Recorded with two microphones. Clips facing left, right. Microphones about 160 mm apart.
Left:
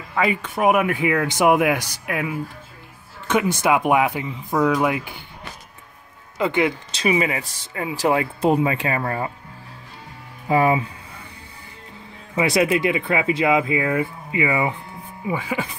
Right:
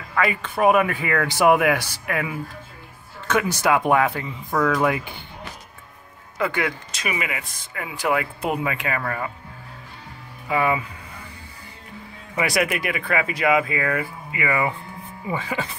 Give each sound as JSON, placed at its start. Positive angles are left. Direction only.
{"t": 0.1, "sound": "speech", "side_deg": 20}
{"t": 3.6, "sound": "speech", "side_deg": 20}
{"t": 6.3, "sound": "speech", "side_deg": 20}
{"t": 10.5, "sound": "speech", "side_deg": 30}
{"t": 12.4, "sound": "speech", "side_deg": 25}